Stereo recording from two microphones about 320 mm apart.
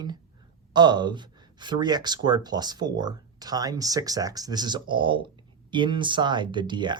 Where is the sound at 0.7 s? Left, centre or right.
Centre.